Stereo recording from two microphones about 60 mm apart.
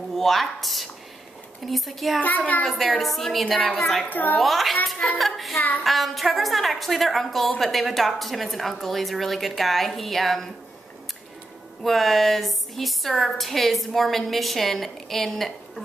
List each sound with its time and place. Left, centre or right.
0.1 s a woman's voice: centre
2.2 s a child's voice: left
2.6 s a woman's voice: centre
4.0 s a child's voice: left
4.4 s a woman's voice: centre
5.1 s child singing: centre
5.9 s a woman's voice: centre
11.8 s a woman's voice: centre